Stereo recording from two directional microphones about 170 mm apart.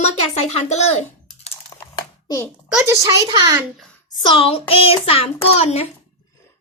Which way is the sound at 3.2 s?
25° right (ahead or behind).